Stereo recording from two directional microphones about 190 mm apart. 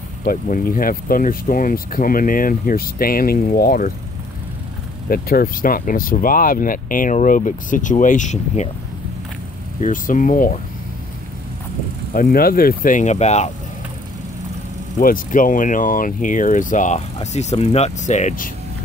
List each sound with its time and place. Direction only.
0.2 s speech: 45° left (ahead or behind)
5.1 s speech: 50° left (ahead or behind)
9.8 s speech: 45° left (ahead or behind)
12.1 s speech: 45° left (ahead or behind)
15.0 s speech: 45° left (ahead or behind)